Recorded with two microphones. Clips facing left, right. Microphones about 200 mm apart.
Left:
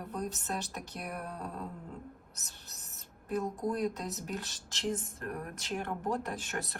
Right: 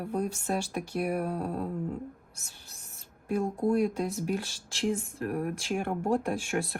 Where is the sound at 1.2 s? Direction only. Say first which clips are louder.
Right 10 dB; 70° right (ahead or behind).